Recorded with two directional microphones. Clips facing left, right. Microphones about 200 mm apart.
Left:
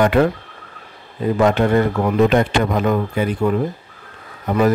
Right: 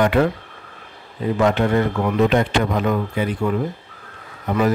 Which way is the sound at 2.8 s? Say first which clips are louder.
Left 2 dB; 45° left (ahead or behind).